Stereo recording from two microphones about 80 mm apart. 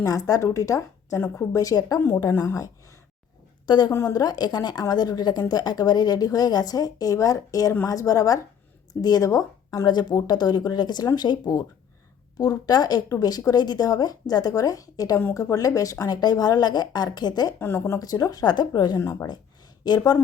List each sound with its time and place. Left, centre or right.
0.0 s a woman's voice: left
2.0 s speech: left
3.7 s a woman's voice: left
3.9 s speech: left
4.2 s a woman's voice: left
9.8 s a woman's voice: left
15.2 s a woman's voice: left
17.6 s speech: left
18.0 s a woman's voice: left
18.9 s speech: left
19.8 s a woman's voice: left